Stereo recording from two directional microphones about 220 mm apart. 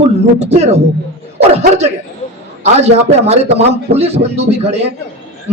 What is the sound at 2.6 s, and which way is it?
Speech, 30° right (ahead or behind).